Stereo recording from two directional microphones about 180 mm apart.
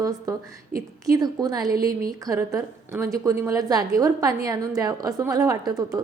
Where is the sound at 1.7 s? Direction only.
55° right (ahead or behind).